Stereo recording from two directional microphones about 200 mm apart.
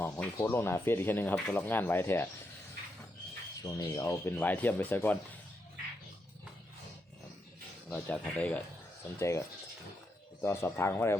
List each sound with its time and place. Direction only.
0.0 s speech: 10° left (ahead or behind)
3.6 s speech: 15° left (ahead or behind)
7.9 s speech: 5° left (ahead or behind)
10.4 s speech: 10° left (ahead or behind)